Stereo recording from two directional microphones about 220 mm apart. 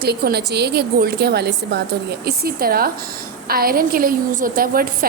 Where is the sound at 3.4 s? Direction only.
45° right (ahead or behind).